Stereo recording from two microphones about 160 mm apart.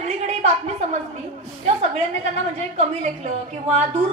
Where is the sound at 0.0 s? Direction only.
40° right (ahead or behind).